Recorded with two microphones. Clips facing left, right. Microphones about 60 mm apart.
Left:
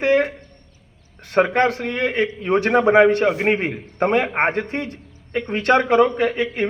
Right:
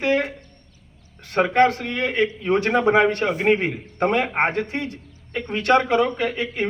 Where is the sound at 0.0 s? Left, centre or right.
Left.